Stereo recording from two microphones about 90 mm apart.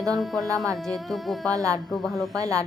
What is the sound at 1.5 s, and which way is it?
Speech, 40° right (ahead or behind).